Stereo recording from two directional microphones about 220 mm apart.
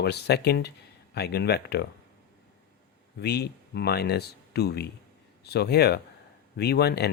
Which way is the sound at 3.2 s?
45° left (ahead or behind).